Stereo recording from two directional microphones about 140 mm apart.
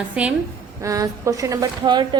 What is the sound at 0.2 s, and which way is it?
Speech, 10° right (ahead or behind).